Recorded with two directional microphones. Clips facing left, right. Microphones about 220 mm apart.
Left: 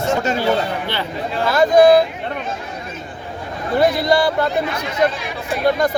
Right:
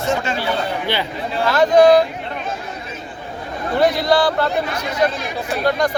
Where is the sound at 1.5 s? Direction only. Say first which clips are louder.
Even; 10° left (ahead or behind).